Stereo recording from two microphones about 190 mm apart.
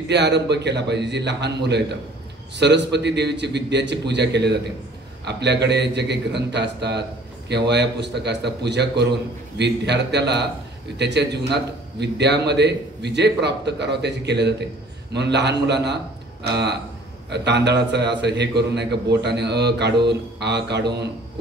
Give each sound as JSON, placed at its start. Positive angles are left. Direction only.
{"t": 0.1, "sound": "a man's voice", "side_deg": -65}
{"t": 17.3, "sound": "a man's voice", "side_deg": -65}